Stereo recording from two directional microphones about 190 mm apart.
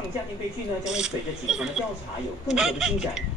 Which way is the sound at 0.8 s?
5° right (ahead or behind).